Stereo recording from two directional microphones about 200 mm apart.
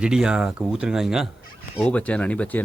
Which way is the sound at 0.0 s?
5° right (ahead or behind).